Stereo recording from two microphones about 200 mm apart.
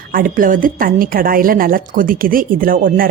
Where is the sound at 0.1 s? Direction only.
45° right (ahead or behind).